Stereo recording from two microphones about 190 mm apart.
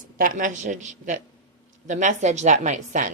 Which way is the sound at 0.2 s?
45° right (ahead or behind).